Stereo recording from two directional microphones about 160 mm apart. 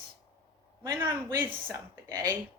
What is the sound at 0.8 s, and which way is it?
Speech, 20° right (ahead or behind).